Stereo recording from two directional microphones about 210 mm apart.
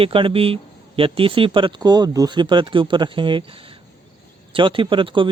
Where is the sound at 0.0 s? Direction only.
25° right (ahead or behind).